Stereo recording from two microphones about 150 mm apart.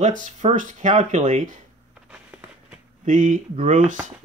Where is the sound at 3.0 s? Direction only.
60° right (ahead or behind).